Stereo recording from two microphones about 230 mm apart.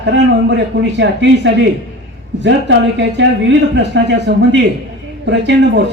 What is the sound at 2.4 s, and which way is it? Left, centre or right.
Speech, right.